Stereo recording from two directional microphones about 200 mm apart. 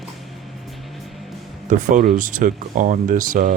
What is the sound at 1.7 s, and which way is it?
Speech, 40° right (ahead or behind).